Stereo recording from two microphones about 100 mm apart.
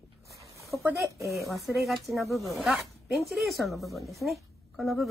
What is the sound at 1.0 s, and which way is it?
Speech, 30° right (ahead or behind).